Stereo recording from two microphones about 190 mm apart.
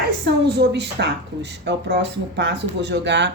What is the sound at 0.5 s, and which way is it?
Speech, 65° right (ahead or behind).